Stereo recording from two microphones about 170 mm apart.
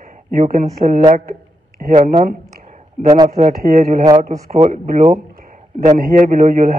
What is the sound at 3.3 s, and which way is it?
Speech, 55° right (ahead or behind).